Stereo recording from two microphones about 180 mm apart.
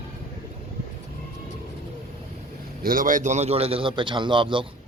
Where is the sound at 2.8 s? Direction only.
50° right (ahead or behind); by 4.6 s 25° right (ahead or behind).